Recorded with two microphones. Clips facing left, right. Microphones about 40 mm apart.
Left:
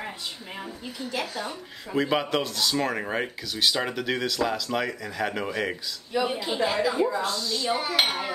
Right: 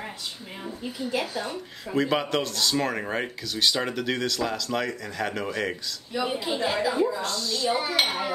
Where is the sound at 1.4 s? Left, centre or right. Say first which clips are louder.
Right 1 dB; centre.